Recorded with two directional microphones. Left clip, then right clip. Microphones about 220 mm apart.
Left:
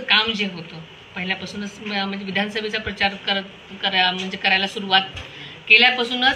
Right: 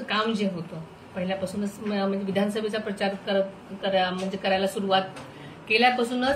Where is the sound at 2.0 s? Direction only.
15° right (ahead or behind).